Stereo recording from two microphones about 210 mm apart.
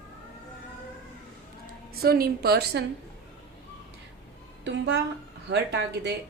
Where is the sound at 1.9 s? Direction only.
45° right (ahead or behind).